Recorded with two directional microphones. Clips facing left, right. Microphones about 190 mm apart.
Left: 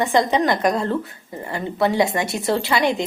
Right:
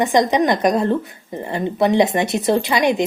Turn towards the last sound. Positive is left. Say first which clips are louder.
# right 3 dB
turn(degrees=-20)  # may be behind; listen again after turning